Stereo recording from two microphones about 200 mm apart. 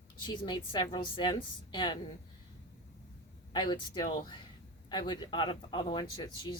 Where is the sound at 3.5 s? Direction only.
20° left (ahead or behind).